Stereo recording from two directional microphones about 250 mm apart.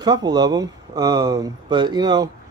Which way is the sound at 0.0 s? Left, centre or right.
Centre.